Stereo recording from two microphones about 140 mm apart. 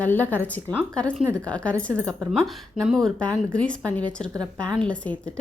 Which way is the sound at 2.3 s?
Centre (ahead or behind).